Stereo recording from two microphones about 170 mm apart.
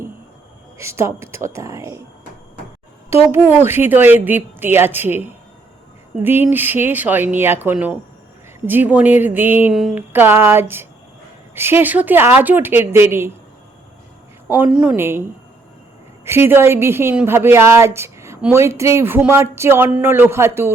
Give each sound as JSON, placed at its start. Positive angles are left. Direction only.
{"t": 0.8, "sound": "a woman's voice", "side_deg": -15}
{"t": 3.2, "sound": "a woman's voice", "side_deg": -15}
{"t": 14.4, "sound": "a woman's voice", "side_deg": -10}
{"t": 16.2, "sound": "a woman's voice", "side_deg": -15}